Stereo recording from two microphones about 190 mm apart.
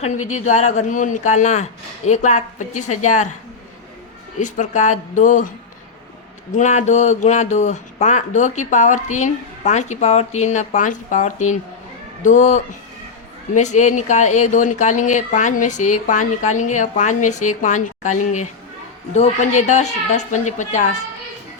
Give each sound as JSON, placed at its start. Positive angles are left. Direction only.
{"t": 0.0, "sound": "speech", "side_deg": 35}
{"t": 4.4, "sound": "speech", "side_deg": 40}
{"t": 6.5, "sound": "speech", "side_deg": 40}